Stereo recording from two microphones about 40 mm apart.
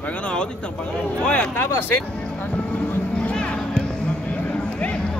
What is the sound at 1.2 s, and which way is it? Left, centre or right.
Speech, left.